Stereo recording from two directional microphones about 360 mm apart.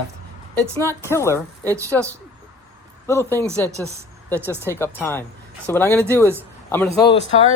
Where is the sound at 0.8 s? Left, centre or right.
Centre.